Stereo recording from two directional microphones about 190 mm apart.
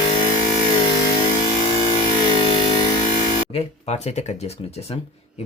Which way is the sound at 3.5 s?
35° left (ahead or behind).